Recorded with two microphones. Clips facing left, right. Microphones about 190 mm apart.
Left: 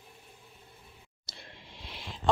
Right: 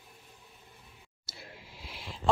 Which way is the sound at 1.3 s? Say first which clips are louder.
Right 2 dB; 5° right (ahead or behind).